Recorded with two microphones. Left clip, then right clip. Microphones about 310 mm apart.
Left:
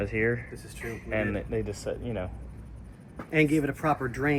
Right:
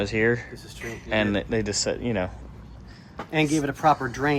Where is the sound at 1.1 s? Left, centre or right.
Centre.